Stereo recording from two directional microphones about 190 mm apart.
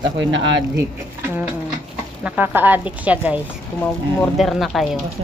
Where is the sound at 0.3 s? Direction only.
70° right (ahead or behind).